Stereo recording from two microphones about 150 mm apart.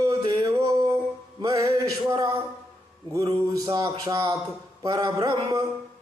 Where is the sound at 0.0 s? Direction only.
20° right (ahead or behind).